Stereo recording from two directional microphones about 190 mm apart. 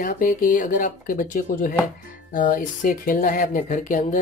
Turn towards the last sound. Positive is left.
turn(degrees=40)  # may be behind; listen again after turning